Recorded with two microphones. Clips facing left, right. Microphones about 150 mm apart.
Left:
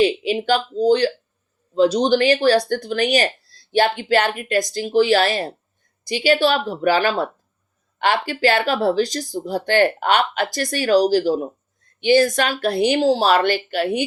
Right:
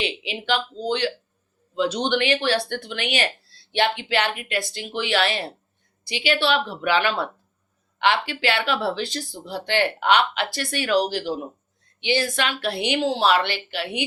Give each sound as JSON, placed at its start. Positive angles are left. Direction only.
{"t": 0.0, "sound": "a woman's voice", "side_deg": 45}